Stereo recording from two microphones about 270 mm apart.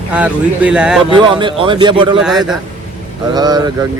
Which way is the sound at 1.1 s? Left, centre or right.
Centre.